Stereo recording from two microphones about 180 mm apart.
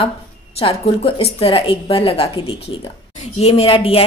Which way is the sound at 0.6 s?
30° left (ahead or behind).